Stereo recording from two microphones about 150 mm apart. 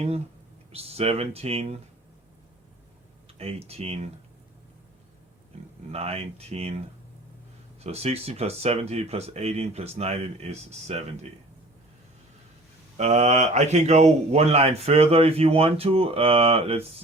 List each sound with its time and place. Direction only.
0.7 s speech: 40° right (ahead or behind)
3.3 s speech: 40° right (ahead or behind)
5.9 s speech: 45° right (ahead or behind)
7.9 s speech: 45° right (ahead or behind)
13.0 s speech: 45° right (ahead or behind)